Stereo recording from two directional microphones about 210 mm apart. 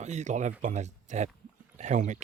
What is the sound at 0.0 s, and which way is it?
Speech, 35° right (ahead or behind).